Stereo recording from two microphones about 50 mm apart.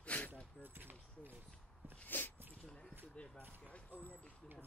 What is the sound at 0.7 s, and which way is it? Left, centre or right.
Speech, right.